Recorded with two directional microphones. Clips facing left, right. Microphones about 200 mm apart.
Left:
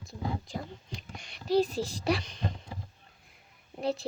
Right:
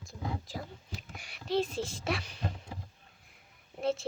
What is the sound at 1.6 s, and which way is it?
Speech, 40° left (ahead or behind).